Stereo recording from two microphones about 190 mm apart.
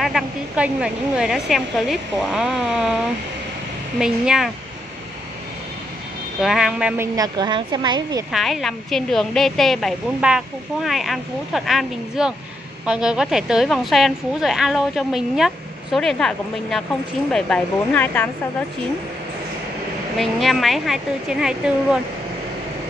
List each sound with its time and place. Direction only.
0.0 s a woman's voice: centre (ahead or behind)
6.4 s a woman's voice: centre (ahead or behind)
7.2 s a woman's voice: 20° right (ahead or behind)
8.3 s a woman's voice: centre (ahead or behind)
20.2 s a woman's voice: centre (ahead or behind)